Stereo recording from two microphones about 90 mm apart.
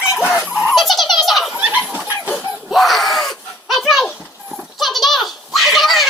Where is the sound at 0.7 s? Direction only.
Centre (ahead or behind).